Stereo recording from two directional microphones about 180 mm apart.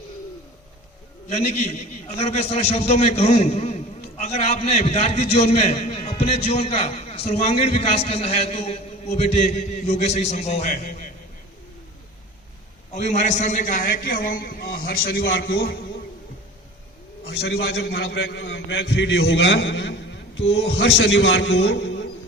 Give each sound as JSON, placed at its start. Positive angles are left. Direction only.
{"t": 1.3, "sound": "a man's voice", "side_deg": 35}
{"t": 12.9, "sound": "a man's voice", "side_deg": 40}
{"t": 17.2, "sound": "a man's voice", "side_deg": 70}